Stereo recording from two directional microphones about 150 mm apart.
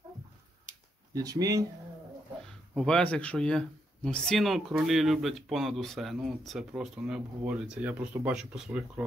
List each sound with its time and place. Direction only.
1.1 s speech: 25° right (ahead or behind)
2.7 s speech: 5° left (ahead or behind)